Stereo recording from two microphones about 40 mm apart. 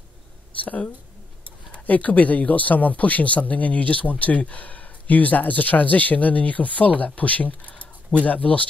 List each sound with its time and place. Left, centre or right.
1.9 s speech: left